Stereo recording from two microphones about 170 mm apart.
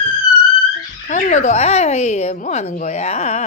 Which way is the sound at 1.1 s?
45° left (ahead or behind).